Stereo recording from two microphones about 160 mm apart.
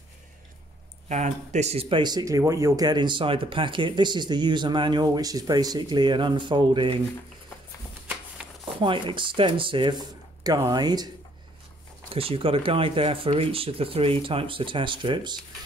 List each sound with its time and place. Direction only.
1.0 s speech: 45° right (ahead or behind); by 7.0 s 30° right (ahead or behind)
8.6 s speech: 30° right (ahead or behind)
12.1 s speech: 35° right (ahead or behind)